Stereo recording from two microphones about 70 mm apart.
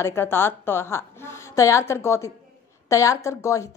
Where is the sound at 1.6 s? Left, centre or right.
Left.